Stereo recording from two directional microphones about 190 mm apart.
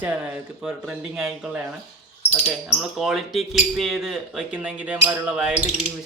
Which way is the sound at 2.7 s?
Centre (ahead or behind).